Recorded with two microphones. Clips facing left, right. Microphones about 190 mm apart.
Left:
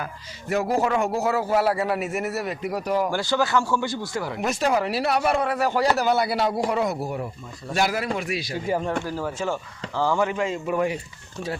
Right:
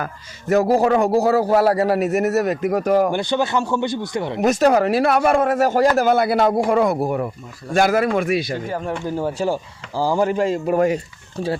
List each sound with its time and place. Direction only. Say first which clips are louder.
0.0 s a man's voice: right 5 dB; 40° right (ahead or behind)
3.1 s a man's voice: right 3 dB; 20° right (ahead or behind)
4.4 s a man's voice: right 8 dB; 40° right (ahead or behind)
9.0 s a man's voice: right 6 dB; 25° right (ahead or behind)